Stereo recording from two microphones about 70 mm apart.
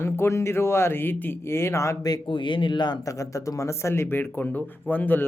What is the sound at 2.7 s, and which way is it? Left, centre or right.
Speech, left.